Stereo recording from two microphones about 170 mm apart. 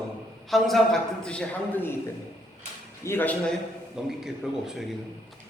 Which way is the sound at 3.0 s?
15° left (ahead or behind).